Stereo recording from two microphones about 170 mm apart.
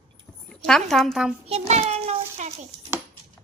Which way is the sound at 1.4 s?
40° right (ahead or behind).